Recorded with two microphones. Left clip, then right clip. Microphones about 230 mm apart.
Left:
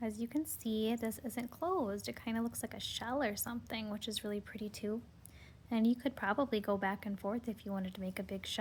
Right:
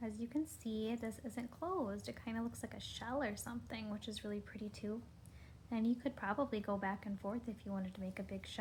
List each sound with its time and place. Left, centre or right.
0.0 s a woman's voice: left